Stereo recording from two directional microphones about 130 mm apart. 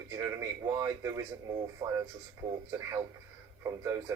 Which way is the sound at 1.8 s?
40° right (ahead or behind).